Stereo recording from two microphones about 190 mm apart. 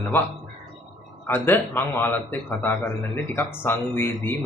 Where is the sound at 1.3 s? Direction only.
10° left (ahead or behind).